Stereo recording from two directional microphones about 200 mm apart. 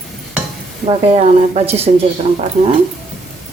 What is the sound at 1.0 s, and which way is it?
Speech, 30° right (ahead or behind).